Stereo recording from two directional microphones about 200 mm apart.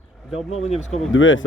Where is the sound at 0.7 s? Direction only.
35° left (ahead or behind).